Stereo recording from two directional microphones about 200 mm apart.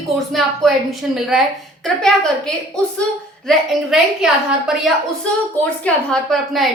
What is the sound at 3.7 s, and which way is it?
A woman's voice, centre (ahead or behind).